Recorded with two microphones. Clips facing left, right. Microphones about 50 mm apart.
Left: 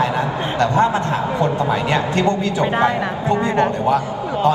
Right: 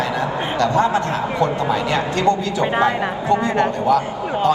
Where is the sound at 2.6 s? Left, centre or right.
Right.